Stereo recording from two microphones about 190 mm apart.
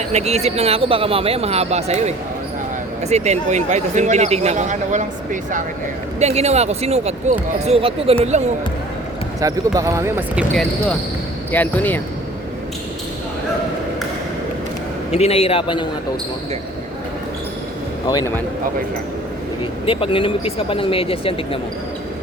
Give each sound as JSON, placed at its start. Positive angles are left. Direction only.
{"t": 0.1, "sound": "speech", "side_deg": -35}
{"t": 9.4, "sound": "speech", "side_deg": -15}
{"t": 11.5, "sound": "speech", "side_deg": 10}
{"t": 15.1, "sound": "a man's voice", "side_deg": 30}
{"t": 19.8, "sound": "speech", "side_deg": 30}